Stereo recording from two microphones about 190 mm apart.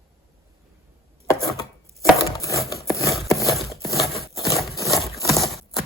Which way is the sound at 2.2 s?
15° left (ahead or behind).